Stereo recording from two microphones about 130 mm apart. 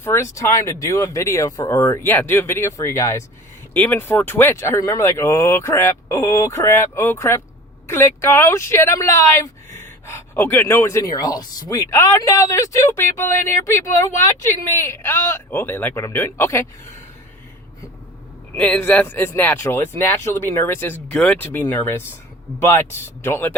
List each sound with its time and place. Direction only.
0.0 s speech: 20° left (ahead or behind)
18.5 s speech: 10° left (ahead or behind)